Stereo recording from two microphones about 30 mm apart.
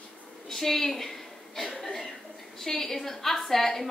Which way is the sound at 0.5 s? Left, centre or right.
Centre.